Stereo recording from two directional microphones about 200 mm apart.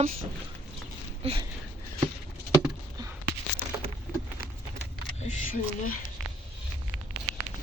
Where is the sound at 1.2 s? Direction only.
30° right (ahead or behind).